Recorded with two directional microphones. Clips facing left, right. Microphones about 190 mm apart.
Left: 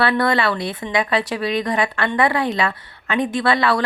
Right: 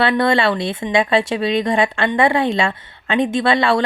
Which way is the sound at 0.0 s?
25° right (ahead or behind).